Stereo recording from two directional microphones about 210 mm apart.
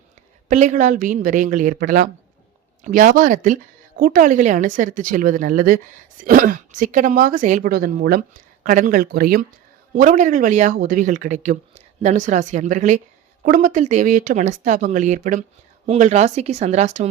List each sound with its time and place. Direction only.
0.4 s speech: 35° right (ahead or behind)